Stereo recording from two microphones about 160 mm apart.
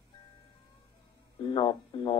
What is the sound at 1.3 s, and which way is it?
Speech, 30° left (ahead or behind).